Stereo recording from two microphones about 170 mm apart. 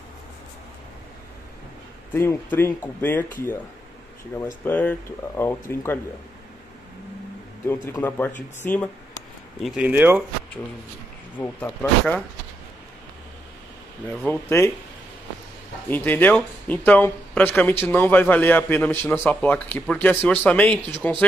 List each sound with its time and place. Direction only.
2.1 s speech: 15° left (ahead or behind)
4.6 s speech: 10° left (ahead or behind)
7.6 s speech: 15° left (ahead or behind)
9.6 s speech: 5° right (ahead or behind)
11.3 s speech: 10° left (ahead or behind)
14.0 s speech: 10° left (ahead or behind)
15.9 s speech: 10° left (ahead or behind)